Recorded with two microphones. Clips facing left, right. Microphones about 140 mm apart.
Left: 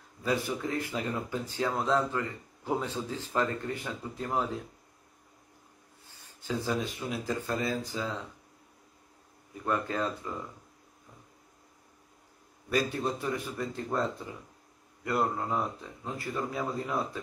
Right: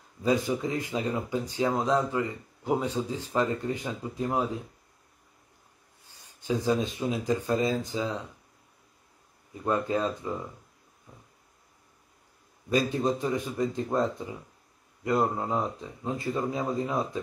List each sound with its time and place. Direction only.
0.2 s speech: 20° right (ahead or behind)
6.4 s speech: 15° right (ahead or behind)
9.7 s speech: 15° right (ahead or behind)
12.6 s speech: 20° right (ahead or behind)